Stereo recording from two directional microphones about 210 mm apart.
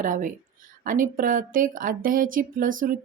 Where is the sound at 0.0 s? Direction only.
40° right (ahead or behind).